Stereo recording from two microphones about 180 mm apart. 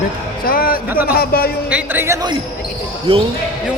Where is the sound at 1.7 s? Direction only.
10° right (ahead or behind).